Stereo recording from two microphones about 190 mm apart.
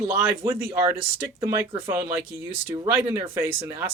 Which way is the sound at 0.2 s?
15° right (ahead or behind).